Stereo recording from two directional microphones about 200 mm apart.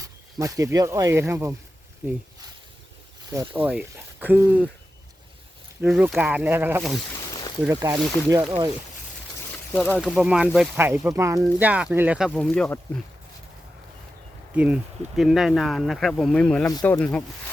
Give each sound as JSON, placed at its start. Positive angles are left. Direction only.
{"t": 0.0, "sound": "speech", "side_deg": -15}
{"t": 3.2, "sound": "speech", "side_deg": -15}
{"t": 5.8, "sound": "speech", "side_deg": -5}
{"t": 7.1, "sound": "a sound", "side_deg": 15}
{"t": 7.7, "sound": "speech", "side_deg": -15}
{"t": 9.7, "sound": "speech", "side_deg": -5}
{"t": 14.5, "sound": "speech", "side_deg": -5}